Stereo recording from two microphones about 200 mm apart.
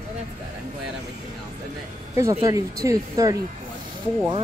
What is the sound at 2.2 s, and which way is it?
Speech, 15° right (ahead or behind).